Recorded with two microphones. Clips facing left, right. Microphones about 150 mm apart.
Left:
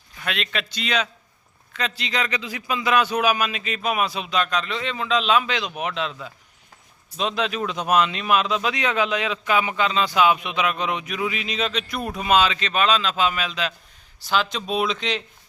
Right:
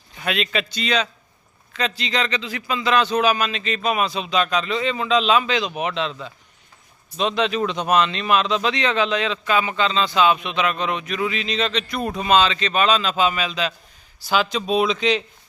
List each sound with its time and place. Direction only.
0.3 s a man's voice: centre (ahead or behind)